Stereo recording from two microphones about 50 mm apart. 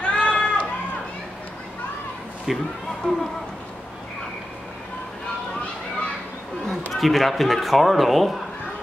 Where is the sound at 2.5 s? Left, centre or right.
Centre.